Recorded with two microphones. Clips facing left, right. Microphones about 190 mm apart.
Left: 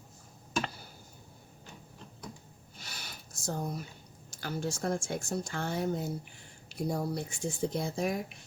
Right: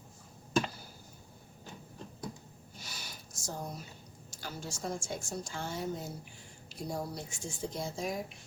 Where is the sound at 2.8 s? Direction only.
60° left (ahead or behind).